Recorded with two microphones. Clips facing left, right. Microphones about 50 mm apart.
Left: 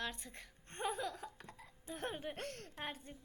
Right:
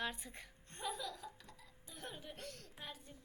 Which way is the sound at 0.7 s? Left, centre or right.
Left.